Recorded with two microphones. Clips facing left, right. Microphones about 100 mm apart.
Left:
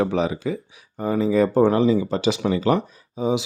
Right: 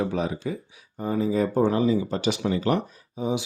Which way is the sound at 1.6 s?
65° left (ahead or behind).